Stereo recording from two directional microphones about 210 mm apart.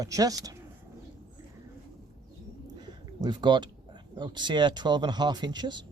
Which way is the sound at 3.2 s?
20° right (ahead or behind).